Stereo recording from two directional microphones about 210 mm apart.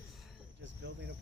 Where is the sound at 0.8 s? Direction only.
55° right (ahead or behind).